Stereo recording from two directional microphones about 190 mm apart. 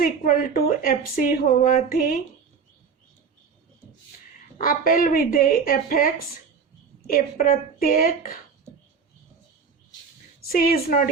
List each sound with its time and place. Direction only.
0.0 s speech: 50° left (ahead or behind)
4.5 s speech: 50° left (ahead or behind)
10.4 s speech: 50° left (ahead or behind)